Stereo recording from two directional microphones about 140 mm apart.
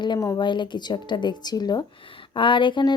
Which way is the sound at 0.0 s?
25° left (ahead or behind).